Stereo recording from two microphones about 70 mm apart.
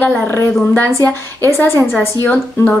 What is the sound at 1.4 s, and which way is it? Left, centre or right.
Speech, left.